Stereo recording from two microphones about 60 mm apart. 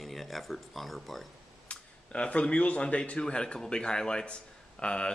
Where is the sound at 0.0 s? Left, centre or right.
Centre.